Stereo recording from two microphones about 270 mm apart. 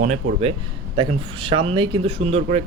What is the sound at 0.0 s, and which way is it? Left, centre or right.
Speech, right.